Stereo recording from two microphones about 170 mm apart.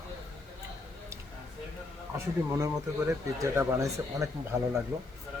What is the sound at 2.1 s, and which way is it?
Speech, 15° right (ahead or behind).